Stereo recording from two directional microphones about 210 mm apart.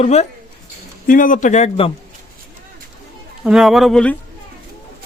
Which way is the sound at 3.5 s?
Centre (ahead or behind).